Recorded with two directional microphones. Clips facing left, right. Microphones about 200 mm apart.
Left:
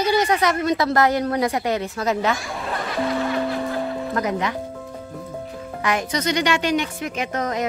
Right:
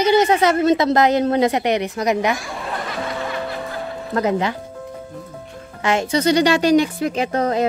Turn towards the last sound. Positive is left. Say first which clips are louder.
# right 5 dB
turn(degrees=-30)  # may be behind; listen again after turning